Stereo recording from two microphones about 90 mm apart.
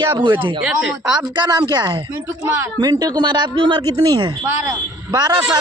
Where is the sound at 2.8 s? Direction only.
45° right (ahead or behind).